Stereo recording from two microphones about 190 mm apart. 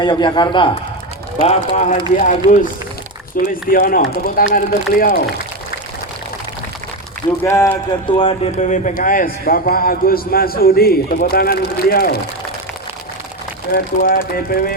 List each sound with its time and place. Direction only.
0.0 s a man's voice: 25° left (ahead or behind)
1.4 s speech: 35° left (ahead or behind)
3.4 s a man's voice: 45° left (ahead or behind)
7.4 s speech: 15° left (ahead or behind)
8.1 s a man's voice: 30° left (ahead or behind); by 12.2 s 55° left (ahead or behind)
13.7 s a man's voice: 50° left (ahead or behind)